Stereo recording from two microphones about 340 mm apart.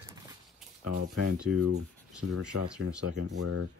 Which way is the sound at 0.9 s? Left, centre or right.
Right.